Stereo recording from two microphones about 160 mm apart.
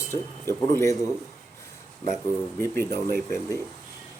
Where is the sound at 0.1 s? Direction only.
15° left (ahead or behind).